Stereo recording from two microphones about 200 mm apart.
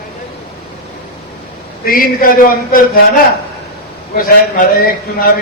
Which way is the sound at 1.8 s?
45° left (ahead or behind).